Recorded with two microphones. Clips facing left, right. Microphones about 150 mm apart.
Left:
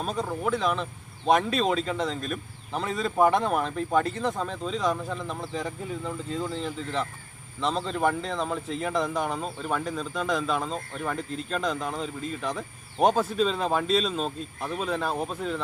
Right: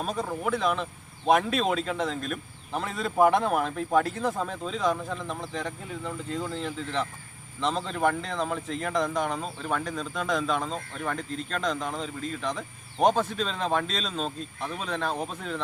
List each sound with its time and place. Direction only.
0.0 s speech: centre (ahead or behind)